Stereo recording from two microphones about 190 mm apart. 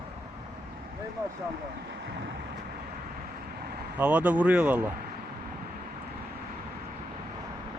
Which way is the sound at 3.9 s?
10° right (ahead or behind).